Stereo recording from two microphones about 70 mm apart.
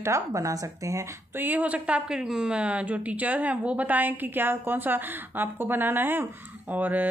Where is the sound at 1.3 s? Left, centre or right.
Right.